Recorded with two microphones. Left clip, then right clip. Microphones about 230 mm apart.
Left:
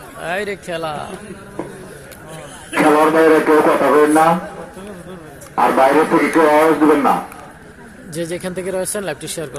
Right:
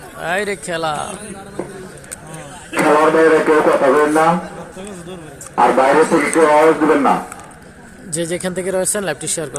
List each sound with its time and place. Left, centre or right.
0.2 s speech: centre
2.7 s a man's voice: left
5.5 s a man's voice: left
8.1 s speech: centre